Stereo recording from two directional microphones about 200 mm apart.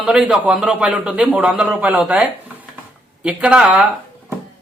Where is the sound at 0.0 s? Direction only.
5° right (ahead or behind).